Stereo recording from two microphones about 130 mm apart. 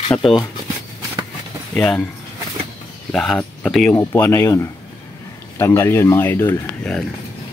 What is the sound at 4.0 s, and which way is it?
Speech, 15° left (ahead or behind).